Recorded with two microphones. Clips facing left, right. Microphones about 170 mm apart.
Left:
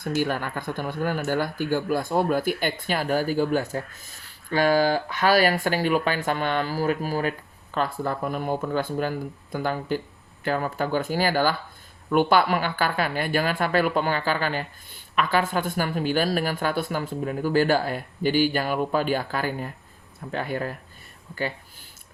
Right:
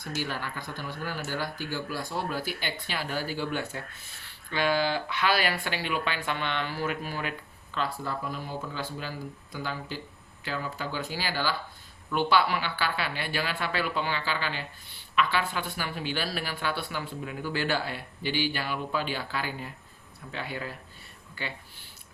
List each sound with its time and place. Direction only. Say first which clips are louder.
0.0 s speech: left 8 dB; 50° left (ahead or behind)